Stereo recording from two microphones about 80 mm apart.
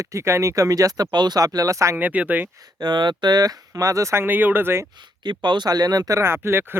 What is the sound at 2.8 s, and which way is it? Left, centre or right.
Speech, right.